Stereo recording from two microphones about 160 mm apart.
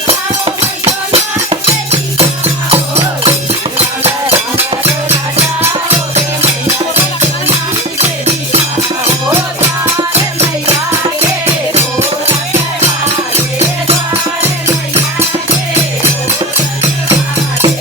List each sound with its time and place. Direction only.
0.1 s music: 40° right (ahead or behind)
4.5 s music: 45° right (ahead or behind)